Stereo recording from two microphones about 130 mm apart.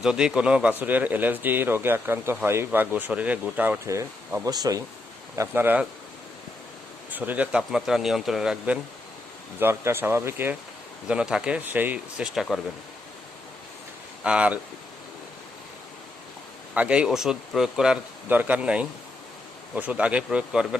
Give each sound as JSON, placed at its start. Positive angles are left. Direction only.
{"t": 0.0, "sound": "speech", "side_deg": -5}
{"t": 3.8, "sound": "speech", "side_deg": -25}
{"t": 5.4, "sound": "speech", "side_deg": -15}
{"t": 7.1, "sound": "speech", "side_deg": -10}
{"t": 9.6, "sound": "speech", "side_deg": -20}
{"t": 14.3, "sound": "speech", "side_deg": -10}
{"t": 16.7, "sound": "speech", "side_deg": -10}